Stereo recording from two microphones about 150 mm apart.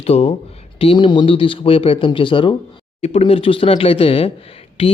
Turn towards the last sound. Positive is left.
turn(degrees=40)  # may be behind; listen again after turning